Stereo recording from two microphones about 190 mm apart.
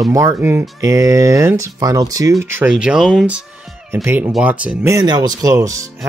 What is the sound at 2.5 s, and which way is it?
Speech, 5° right (ahead or behind).